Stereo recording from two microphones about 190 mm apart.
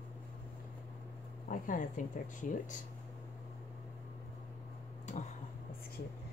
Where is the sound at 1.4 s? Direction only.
45° left (ahead or behind).